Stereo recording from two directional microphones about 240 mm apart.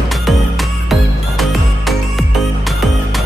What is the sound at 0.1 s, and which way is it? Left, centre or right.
Music, centre.